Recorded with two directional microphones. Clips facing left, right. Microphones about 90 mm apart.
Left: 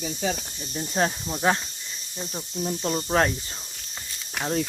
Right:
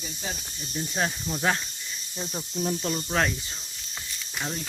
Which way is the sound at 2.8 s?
30° left (ahead or behind).